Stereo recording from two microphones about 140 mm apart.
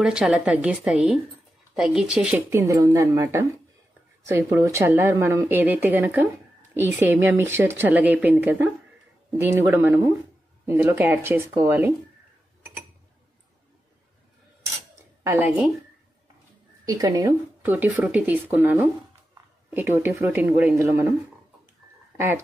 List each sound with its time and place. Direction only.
0.0 s speech: 5° right (ahead or behind)
2.5 s speech: 20° right (ahead or behind)
16.8 s speech: 25° right (ahead or behind)
17.6 s speech: 10° right (ahead or behind)
22.1 s speech: 15° right (ahead or behind)